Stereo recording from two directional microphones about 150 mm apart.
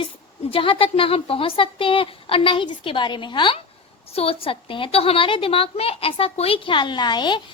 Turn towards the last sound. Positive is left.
turn(degrees=30)  # may be behind; listen again after turning